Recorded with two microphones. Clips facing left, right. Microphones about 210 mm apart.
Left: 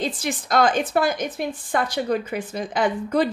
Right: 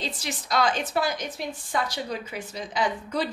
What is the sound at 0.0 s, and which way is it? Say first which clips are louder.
A woman's voice: left 7 dB; 50° left (ahead or behind).